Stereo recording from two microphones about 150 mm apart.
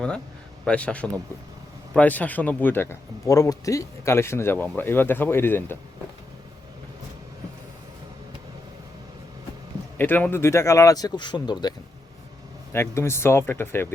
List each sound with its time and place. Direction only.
0.6 s speech: 5° left (ahead or behind)
10.0 s speech: 10° left (ahead or behind); by 11.7 s 30° left (ahead or behind)
12.7 s speech: 15° left (ahead or behind)